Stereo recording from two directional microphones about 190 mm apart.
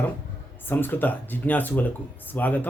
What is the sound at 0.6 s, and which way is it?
Speech, 10° left (ahead or behind).